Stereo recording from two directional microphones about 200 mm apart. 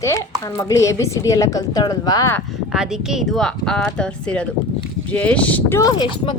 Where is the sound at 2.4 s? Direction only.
Centre (ahead or behind).